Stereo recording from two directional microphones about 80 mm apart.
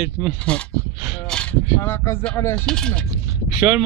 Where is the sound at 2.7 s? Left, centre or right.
Centre.